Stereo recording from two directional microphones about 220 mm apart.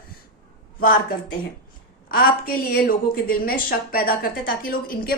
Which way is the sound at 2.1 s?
40° left (ahead or behind).